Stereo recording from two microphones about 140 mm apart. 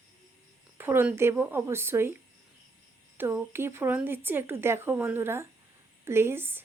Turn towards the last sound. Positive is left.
turn(degrees=-15)  # may be behind; listen again after turning